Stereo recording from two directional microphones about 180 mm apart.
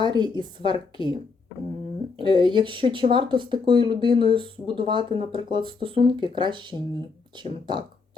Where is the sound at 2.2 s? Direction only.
25° right (ahead or behind).